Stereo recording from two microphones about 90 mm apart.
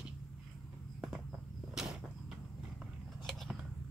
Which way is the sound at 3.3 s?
Centre (ahead or behind).